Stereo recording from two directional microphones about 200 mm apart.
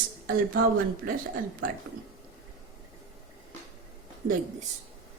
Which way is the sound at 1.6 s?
45° right (ahead or behind).